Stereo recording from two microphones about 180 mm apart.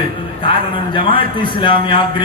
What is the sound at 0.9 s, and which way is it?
A man's voice, 30° left (ahead or behind).